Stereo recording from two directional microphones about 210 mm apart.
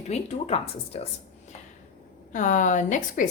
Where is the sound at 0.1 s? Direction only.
30° left (ahead or behind).